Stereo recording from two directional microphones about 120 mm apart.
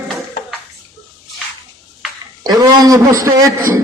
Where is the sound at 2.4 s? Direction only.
35° right (ahead or behind).